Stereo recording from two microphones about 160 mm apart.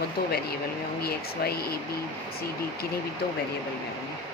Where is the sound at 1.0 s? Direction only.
75° left (ahead or behind).